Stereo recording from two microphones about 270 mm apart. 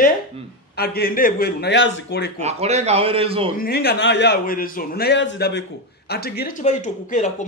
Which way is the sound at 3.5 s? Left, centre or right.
Left.